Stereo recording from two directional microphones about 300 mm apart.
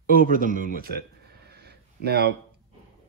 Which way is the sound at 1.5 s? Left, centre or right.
Right.